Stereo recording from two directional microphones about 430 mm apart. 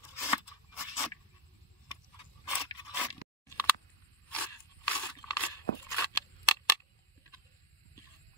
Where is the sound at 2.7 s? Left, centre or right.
Centre.